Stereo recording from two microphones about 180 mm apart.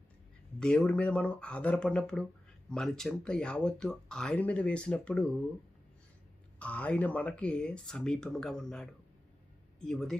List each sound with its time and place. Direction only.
0.6 s speech: 5° left (ahead or behind)
6.6 s speech: 5° left (ahead or behind)